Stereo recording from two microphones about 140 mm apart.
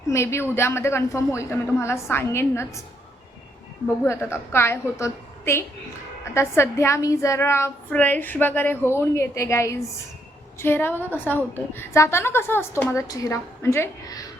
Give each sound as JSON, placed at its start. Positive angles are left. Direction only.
{"t": 0.1, "sound": "a woman's voice", "side_deg": 20}
{"t": 4.0, "sound": "a woman's voice", "side_deg": 20}